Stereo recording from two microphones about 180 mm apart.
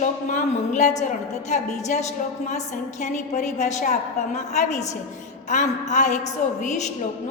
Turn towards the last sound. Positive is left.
turn(degrees=40)  # may be behind; listen again after turning